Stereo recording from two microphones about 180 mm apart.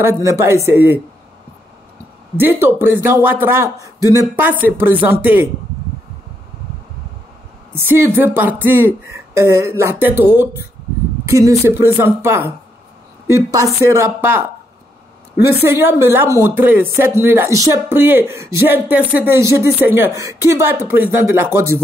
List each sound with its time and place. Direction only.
0.0 s speech: 15° right (ahead or behind)
2.3 s speech: 10° right (ahead or behind)
7.7 s speech: 10° right (ahead or behind)
15.8 s speech: 15° right (ahead or behind)